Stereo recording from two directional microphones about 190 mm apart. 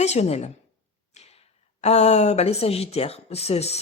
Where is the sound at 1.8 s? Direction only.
35° left (ahead or behind).